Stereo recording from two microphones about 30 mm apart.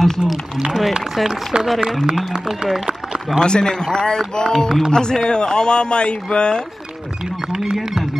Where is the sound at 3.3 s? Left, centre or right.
Centre.